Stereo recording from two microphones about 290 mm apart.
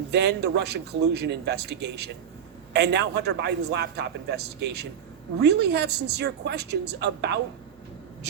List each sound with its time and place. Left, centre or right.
0.1 s a man's voice: right